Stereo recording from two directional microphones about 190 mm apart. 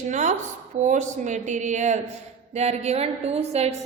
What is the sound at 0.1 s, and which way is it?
A woman's voice, 40° right (ahead or behind).